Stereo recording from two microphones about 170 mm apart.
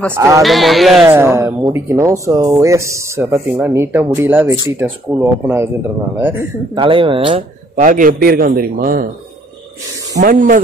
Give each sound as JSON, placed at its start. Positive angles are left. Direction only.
{"t": 0.1, "sound": "speech", "side_deg": -15}
{"t": 0.4, "sound": "speech", "side_deg": 0}
{"t": 1.1, "sound": "speech", "side_deg": -15}
{"t": 6.7, "sound": "speech", "side_deg": -30}
{"t": 7.7, "sound": "a man's voice", "side_deg": -50}
{"t": 10.2, "sound": "speech", "side_deg": -55}